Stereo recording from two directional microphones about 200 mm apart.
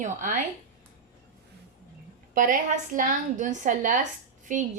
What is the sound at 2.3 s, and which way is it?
A woman's voice, 40° right (ahead or behind).